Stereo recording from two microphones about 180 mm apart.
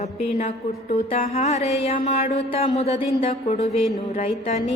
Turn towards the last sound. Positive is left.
turn(degrees=35)  # may be behind; listen again after turning